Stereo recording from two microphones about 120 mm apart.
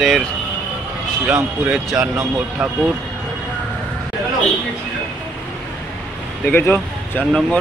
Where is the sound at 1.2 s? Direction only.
15° right (ahead or behind).